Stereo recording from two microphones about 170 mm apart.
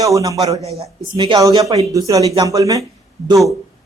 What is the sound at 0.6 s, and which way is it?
A man's voice, 35° right (ahead or behind).